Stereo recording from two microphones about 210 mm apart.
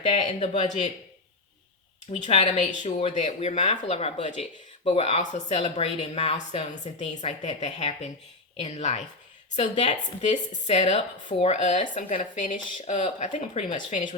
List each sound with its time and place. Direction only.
0.0 s speech: 30° left (ahead or behind)
2.0 s speech: 30° left (ahead or behind)